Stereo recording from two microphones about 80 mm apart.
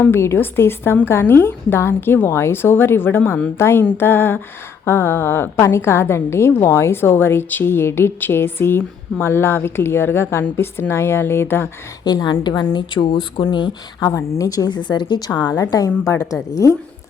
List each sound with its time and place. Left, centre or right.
0.1 s a woman's voice: left
12.0 s a woman's voice: left
14.0 s a woman's voice: left
14.7 s speech: left
15.7 s a woman's voice: left
16.0 s a woman's voice: left